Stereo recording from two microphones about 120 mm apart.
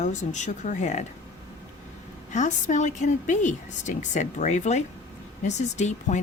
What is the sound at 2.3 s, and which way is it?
A woman's voice, 85° left.